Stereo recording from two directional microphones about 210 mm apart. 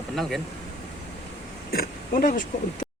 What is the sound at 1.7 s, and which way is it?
Speech, 45° left (ahead or behind).